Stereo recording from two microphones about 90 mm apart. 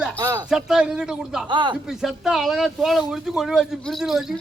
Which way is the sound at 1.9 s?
5° right (ahead or behind).